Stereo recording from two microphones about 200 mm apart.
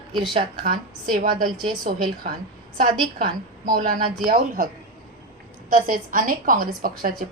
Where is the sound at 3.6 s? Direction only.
45° right (ahead or behind).